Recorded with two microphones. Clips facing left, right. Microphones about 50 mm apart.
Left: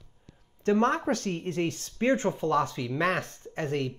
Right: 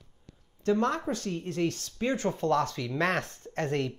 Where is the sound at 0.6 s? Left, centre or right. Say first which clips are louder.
Left 3 dB; left.